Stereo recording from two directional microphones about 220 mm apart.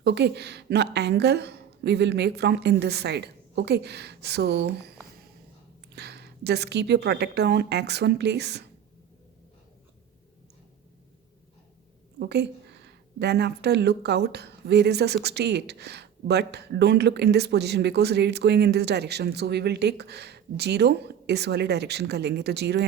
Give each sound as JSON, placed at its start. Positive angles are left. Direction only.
{"t": 0.0, "sound": "speech", "side_deg": -50}
{"t": 5.9, "sound": "speech", "side_deg": -50}
{"t": 12.2, "sound": "speech", "side_deg": -50}